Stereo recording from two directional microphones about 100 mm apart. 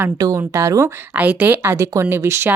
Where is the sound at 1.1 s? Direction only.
15° right (ahead or behind).